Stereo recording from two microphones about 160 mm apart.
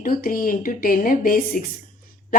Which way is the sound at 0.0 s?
65° left (ahead or behind).